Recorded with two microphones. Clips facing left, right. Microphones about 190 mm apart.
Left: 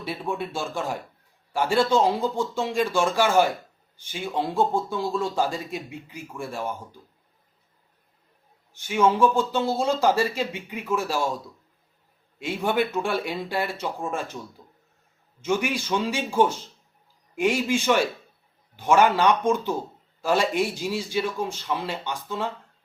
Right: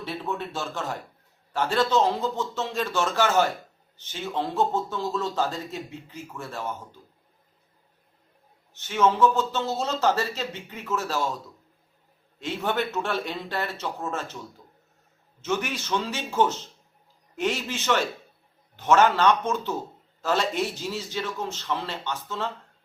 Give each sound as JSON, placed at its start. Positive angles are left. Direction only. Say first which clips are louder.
{"t": 0.0, "sound": "a man's voice", "louder": "left 2 dB", "side_deg": 10}
{"t": 8.7, "sound": "a man's voice", "louder": "left 2 dB", "side_deg": 10}
{"t": 12.4, "sound": "a man's voice", "louder": "left 3 dB", "side_deg": 10}